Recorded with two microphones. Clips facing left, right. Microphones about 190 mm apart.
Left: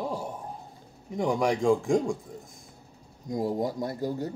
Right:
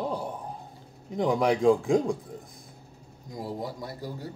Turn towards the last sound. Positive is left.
turn(degrees=45)  # may be behind; listen again after turning